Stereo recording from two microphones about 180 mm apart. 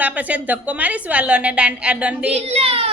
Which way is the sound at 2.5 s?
30° right (ahead or behind).